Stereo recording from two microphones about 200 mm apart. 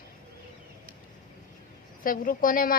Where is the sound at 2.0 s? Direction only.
45° left (ahead or behind).